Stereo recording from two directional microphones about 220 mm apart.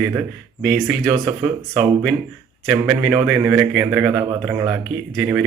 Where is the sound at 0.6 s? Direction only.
Centre (ahead or behind).